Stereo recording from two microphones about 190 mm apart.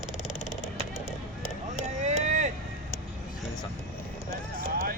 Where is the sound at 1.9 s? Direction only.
40° right (ahead or behind).